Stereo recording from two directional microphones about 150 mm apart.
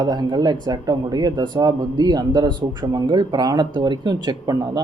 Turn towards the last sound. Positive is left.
turn(degrees=-30)  # may be behind; listen again after turning